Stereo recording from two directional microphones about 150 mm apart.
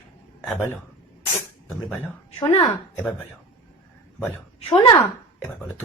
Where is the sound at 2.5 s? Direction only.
25° left (ahead or behind).